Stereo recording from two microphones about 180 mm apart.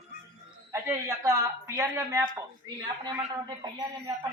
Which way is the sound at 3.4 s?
20° right (ahead or behind).